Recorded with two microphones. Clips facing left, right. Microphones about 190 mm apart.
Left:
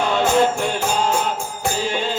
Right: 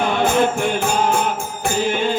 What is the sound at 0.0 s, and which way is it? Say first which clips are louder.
Music: even; 55° right (ahead or behind).